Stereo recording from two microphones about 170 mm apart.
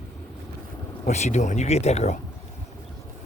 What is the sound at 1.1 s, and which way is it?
Speech, 40° left (ahead or behind).